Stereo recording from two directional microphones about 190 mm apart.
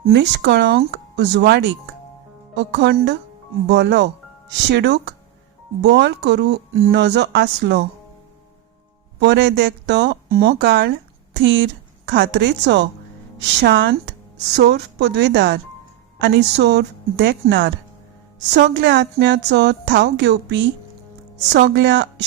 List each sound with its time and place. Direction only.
0.0 s a woman's voice: 60° right (ahead or behind)
9.2 s a woman's voice: 65° right (ahead or behind)
21.7 s a woman's voice: 65° right (ahead or behind)